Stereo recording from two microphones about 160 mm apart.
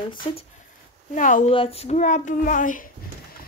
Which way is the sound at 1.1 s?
55° left (ahead or behind).